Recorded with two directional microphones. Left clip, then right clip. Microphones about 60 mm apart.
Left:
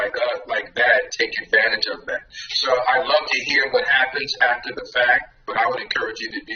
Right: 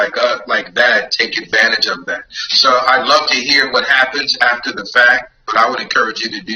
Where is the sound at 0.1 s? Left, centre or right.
Right.